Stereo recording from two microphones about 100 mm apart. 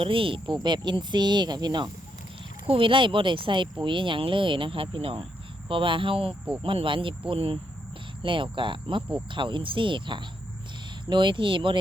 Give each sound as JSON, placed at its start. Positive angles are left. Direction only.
{"t": 0.0, "sound": "speech", "side_deg": -60}
{"t": 2.6, "sound": "speech", "side_deg": -60}